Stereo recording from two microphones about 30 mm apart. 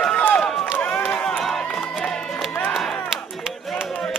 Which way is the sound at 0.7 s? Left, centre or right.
Left.